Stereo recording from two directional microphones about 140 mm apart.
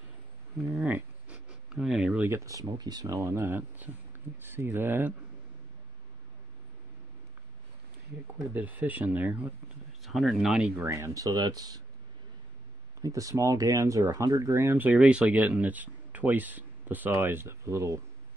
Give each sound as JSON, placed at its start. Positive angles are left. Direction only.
{"t": 0.7, "sound": "speech", "side_deg": -10}
{"t": 8.5, "sound": "speech", "side_deg": -10}
{"t": 10.0, "sound": "speech", "side_deg": 0}
{"t": 10.8, "sound": "speech", "side_deg": -20}
{"t": 13.0, "sound": "speech", "side_deg": -25}